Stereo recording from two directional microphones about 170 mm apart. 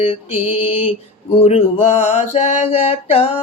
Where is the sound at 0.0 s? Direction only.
35° left (ahead or behind).